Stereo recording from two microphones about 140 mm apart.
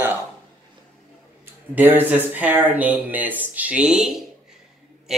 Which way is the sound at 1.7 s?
15° right (ahead or behind).